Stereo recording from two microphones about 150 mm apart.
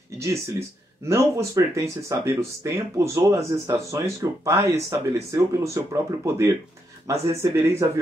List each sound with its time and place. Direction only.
0.2 s speech: 20° right (ahead or behind)